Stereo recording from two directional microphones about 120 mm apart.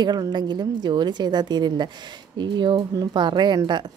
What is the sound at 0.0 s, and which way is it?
Speech, 35° right (ahead or behind).